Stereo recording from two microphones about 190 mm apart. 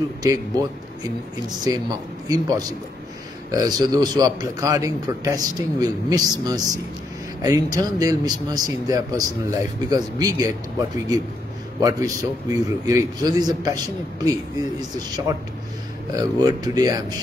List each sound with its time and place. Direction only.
0.2 s a man's voice: 20° right (ahead or behind)
11.8 s a man's voice: 20° right (ahead or behind)
14.8 s a man's voice: 20° right (ahead or behind)